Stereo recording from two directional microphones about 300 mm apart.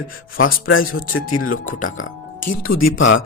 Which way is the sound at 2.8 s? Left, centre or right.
Left.